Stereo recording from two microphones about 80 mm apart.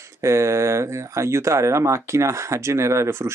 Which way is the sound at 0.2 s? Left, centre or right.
Right.